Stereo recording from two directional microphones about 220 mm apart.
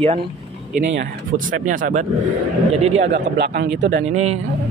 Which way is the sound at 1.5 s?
35° right (ahead or behind).